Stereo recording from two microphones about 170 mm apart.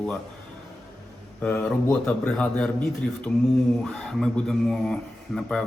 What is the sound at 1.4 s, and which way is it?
A man's voice, 10° left (ahead or behind).